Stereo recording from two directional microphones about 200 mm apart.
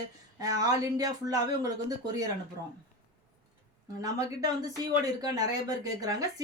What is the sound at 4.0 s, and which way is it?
Speech, 15° right (ahead or behind).